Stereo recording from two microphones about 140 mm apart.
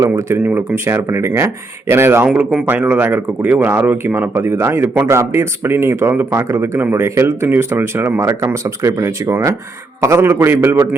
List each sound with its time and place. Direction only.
0.0 s speech: 20° right (ahead or behind)